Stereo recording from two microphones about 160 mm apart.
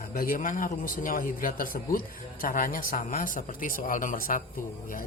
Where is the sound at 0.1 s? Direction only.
65° left (ahead or behind).